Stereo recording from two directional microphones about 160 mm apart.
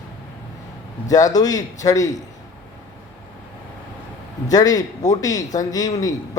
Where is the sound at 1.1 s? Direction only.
20° left (ahead or behind).